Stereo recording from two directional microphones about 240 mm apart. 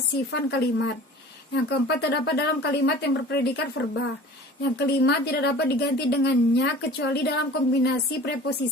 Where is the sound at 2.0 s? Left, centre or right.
Left.